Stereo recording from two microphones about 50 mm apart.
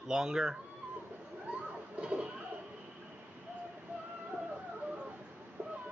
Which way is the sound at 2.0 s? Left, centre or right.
Centre.